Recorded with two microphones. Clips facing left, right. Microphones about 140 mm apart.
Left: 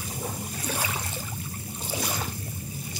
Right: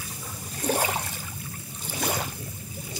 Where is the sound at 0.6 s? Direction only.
45° right (ahead or behind).